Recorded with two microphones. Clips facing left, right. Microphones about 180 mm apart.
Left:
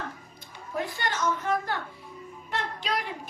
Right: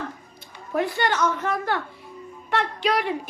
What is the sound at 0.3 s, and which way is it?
A woman's voice, 70° right (ahead or behind).